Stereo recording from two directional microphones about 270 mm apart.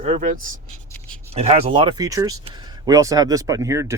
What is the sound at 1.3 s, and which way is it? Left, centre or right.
Speech, right.